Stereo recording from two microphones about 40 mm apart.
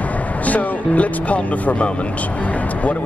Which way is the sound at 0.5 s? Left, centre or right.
Left.